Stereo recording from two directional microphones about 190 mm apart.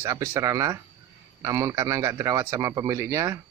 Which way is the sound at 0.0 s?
15° right (ahead or behind).